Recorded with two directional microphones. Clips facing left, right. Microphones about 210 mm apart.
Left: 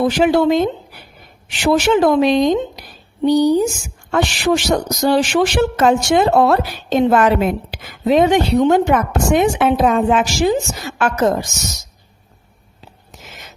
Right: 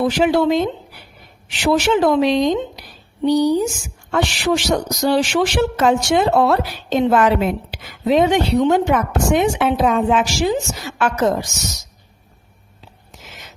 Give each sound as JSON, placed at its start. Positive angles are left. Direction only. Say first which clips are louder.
{"t": 0.0, "sound": "a woman's voice", "louder": "left 2 dB", "side_deg": 50}